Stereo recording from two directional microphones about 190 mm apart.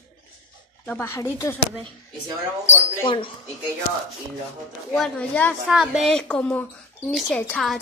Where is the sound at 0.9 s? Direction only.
10° left (ahead or behind).